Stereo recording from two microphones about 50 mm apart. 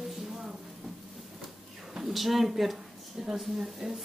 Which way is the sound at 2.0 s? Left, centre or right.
Centre.